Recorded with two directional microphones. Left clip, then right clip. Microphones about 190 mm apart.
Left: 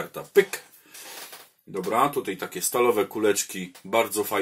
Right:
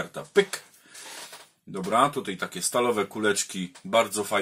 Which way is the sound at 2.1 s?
20° left (ahead or behind).